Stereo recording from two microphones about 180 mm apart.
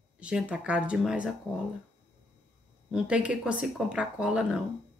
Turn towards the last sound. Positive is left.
turn(degrees=-5)  # may be behind; listen again after turning